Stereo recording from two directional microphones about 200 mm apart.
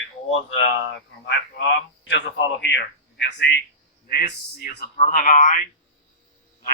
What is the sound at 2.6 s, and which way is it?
Speech, 60° left (ahead or behind).